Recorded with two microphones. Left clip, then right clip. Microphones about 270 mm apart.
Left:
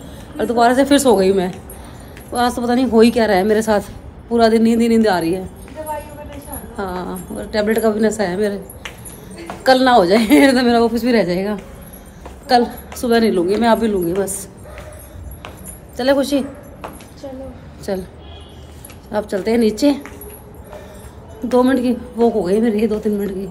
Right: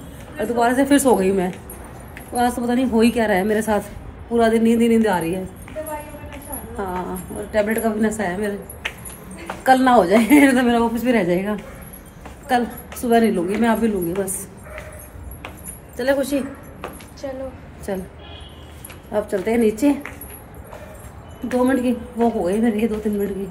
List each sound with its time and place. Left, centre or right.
0.4 s a woman's voice: centre
6.8 s a woman's voice: centre
9.6 s a woman's voice: centre
16.0 s a woman's voice: centre
17.9 s a woman's voice: centre
19.1 s a woman's voice: centre
21.5 s a woman's voice: centre